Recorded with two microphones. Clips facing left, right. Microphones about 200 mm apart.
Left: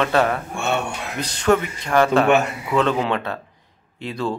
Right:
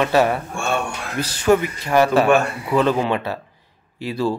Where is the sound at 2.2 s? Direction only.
20° left (ahead or behind).